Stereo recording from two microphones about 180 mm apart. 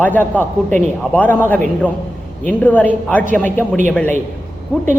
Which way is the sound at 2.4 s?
10° left (ahead or behind).